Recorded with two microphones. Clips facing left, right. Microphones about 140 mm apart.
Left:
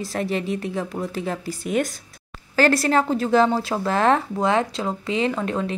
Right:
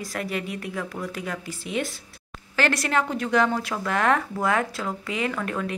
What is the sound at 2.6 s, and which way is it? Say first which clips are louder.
A woman's voice: left 5 dB; 35° left (ahead or behind).